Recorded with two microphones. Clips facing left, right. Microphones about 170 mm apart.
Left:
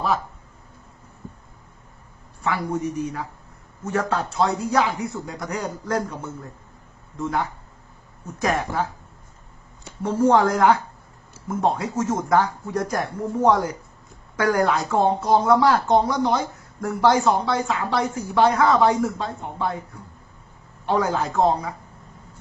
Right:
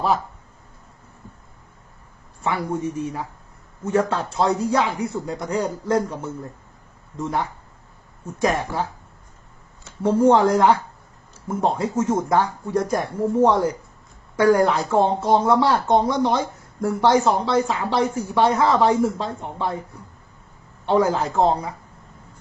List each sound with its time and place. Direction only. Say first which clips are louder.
2.4 s speech: right 1 dB; 25° right (ahead or behind)
10.0 s speech: right 2 dB; 30° right (ahead or behind)
20.8 s speech: right 3 dB; 25° right (ahead or behind)